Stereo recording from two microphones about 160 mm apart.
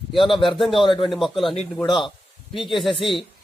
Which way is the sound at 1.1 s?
Centre (ahead or behind).